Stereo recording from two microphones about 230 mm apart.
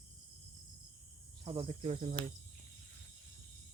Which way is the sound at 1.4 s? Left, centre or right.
Right.